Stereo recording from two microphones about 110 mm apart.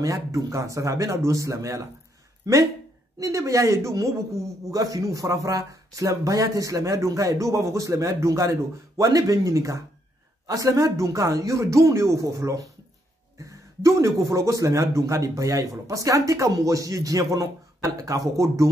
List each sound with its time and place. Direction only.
0.0 s speech: 30° right (ahead or behind)